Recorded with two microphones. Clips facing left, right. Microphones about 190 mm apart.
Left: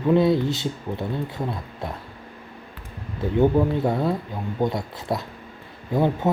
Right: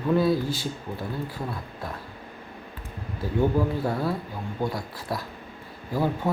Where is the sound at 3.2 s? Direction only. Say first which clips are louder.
Left 5 dB; 20° left (ahead or behind).